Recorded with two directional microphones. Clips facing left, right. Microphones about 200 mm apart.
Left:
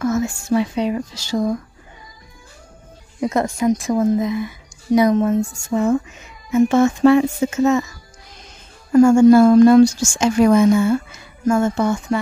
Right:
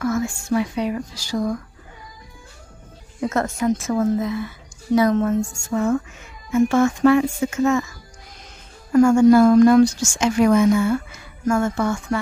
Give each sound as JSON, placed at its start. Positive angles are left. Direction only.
{"t": 0.0, "sound": "speech", "side_deg": 20}
{"t": 3.2, "sound": "a woman's voice", "side_deg": 15}
{"t": 8.9, "sound": "speech", "side_deg": 25}